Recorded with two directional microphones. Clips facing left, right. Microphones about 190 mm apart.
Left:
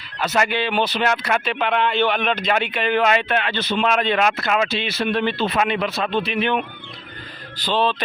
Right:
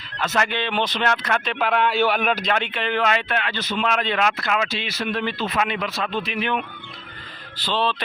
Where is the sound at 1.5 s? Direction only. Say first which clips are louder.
Right 1 dB; centre (ahead or behind).